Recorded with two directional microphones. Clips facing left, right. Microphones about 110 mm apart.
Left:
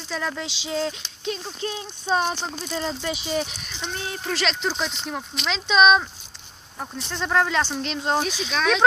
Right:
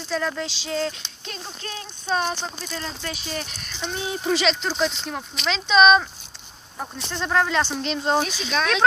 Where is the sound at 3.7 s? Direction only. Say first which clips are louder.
Right 6 dB; 5° right (ahead or behind).